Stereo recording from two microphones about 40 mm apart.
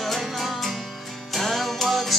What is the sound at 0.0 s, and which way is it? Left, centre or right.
Music, centre.